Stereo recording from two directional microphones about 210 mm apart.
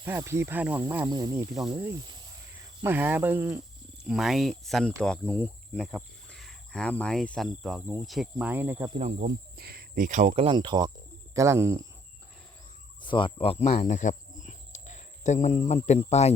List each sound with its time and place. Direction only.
0.0 s speech: 15° right (ahead or behind)
9.0 s speech: 35° right (ahead or behind)
9.6 s speech: 45° right (ahead or behind); by 11.9 s 15° right (ahead or behind)
13.0 s speech: 25° left (ahead or behind)